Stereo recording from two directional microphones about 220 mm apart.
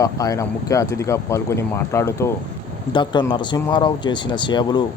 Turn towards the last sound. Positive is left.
turn(degrees=20)  # may be behind; listen again after turning